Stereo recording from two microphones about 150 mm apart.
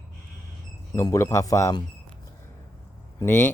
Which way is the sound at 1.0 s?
20° left (ahead or behind).